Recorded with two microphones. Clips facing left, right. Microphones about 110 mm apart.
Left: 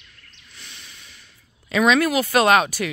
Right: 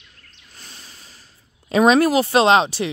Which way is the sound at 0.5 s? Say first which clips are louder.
Right 1 dB; 40° right (ahead or behind).